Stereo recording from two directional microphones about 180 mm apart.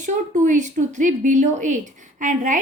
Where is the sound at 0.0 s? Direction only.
45° right (ahead or behind).